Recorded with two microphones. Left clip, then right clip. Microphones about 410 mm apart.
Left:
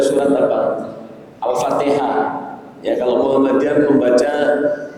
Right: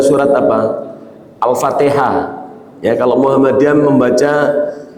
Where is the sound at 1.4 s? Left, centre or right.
Right.